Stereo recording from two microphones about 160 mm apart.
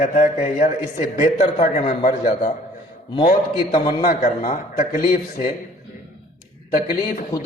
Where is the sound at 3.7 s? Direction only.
60° left (ahead or behind).